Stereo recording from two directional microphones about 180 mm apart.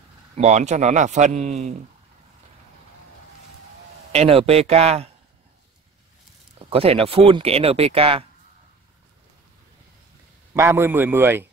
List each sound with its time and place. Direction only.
0.4 s speech: 40° right (ahead or behind)
4.1 s speech: 35° right (ahead or behind)
6.7 s speech: 35° right (ahead or behind)
10.5 s a man's voice: 15° right (ahead or behind)